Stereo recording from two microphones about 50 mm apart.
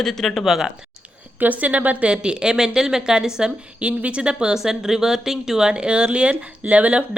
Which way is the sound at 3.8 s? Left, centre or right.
Right.